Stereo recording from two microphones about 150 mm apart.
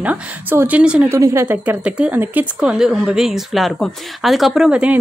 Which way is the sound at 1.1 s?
20° right (ahead or behind).